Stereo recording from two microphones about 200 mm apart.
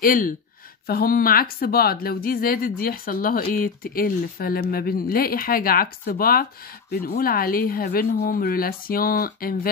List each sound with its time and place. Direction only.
0.0 s speech: 45° left (ahead or behind)